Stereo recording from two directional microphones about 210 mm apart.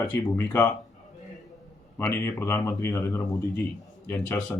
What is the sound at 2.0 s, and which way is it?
Speech, 10° left (ahead or behind).